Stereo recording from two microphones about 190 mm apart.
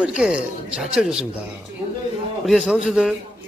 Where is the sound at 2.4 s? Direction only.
Centre (ahead or behind).